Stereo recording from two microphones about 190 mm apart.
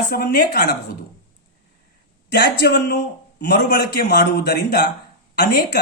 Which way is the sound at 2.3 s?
55° left (ahead or behind).